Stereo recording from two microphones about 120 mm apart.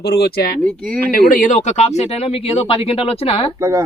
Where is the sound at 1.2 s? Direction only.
90° left.